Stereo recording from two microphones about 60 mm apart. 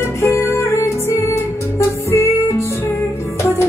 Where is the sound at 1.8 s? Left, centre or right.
Left.